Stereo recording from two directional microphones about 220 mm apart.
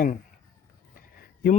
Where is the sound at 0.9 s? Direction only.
40° left (ahead or behind).